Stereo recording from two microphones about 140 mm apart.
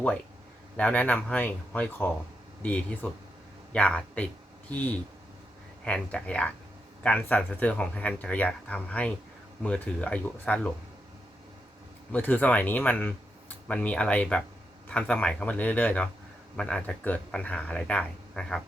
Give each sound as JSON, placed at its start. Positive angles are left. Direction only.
{"t": 0.8, "sound": "speech", "side_deg": 10}
{"t": 12.1, "sound": "speech", "side_deg": 10}